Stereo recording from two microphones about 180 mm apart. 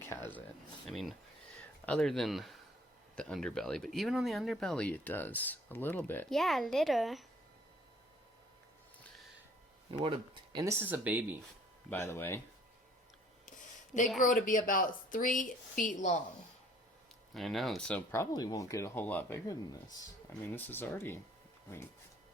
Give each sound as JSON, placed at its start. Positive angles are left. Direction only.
{"t": 0.9, "sound": "speech", "side_deg": 0}
{"t": 10.0, "sound": "speech", "side_deg": -30}
{"t": 10.6, "sound": "speech", "side_deg": -15}
{"t": 11.9, "sound": "speech", "side_deg": 15}
{"t": 14.2, "sound": "speech", "side_deg": 45}
{"t": 17.3, "sound": "speech", "side_deg": 0}